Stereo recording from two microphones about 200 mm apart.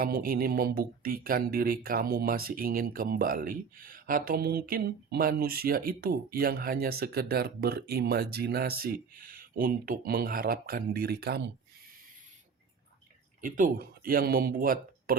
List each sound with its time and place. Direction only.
0.0 s speech: 50° right (ahead or behind)
13.4 s speech: 45° right (ahead or behind)